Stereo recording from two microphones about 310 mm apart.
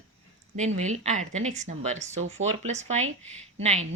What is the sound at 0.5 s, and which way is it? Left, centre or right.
A woman's voice, right.